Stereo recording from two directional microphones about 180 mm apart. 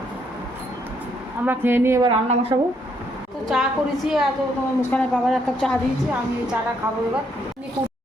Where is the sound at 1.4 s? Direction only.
10° right (ahead or behind).